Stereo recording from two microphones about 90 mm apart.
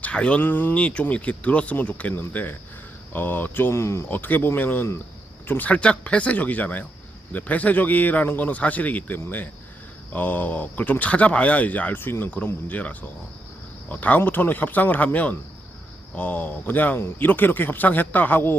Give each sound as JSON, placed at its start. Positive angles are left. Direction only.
{"t": 0.0, "sound": "speech", "side_deg": 15}